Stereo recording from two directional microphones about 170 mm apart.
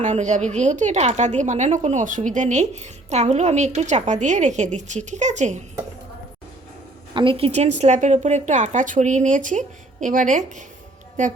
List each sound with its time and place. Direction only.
0.0 s a woman's voice: 45° right (ahead or behind)
7.1 s a woman's voice: 30° right (ahead or behind); by 11.3 s 45° right (ahead or behind)